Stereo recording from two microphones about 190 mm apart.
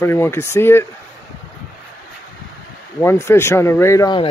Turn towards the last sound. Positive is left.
turn(degrees=20)  # may be behind; listen again after turning